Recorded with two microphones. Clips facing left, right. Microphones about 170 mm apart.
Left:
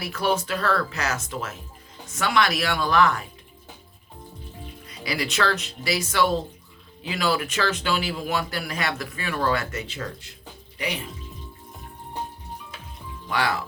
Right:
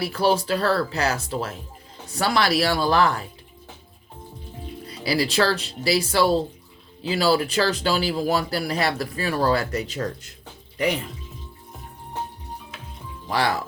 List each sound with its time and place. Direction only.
0.0 s speech: 30° right (ahead or behind)
4.9 s speech: 30° right (ahead or behind)
13.2 s speech: 35° right (ahead or behind)